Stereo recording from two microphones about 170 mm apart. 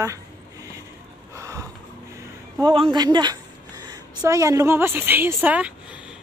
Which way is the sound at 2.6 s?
25° right (ahead or behind).